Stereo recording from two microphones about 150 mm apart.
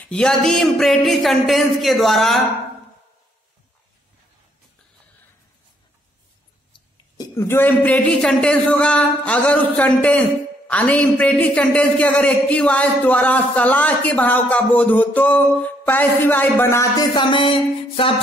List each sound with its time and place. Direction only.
0.0 s speech: 5° left (ahead or behind)
6.7 s a man's voice: 25° left (ahead or behind)
17.1 s a sound: 30° left (ahead or behind)